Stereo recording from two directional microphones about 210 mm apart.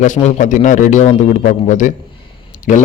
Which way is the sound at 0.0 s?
30° left (ahead or behind).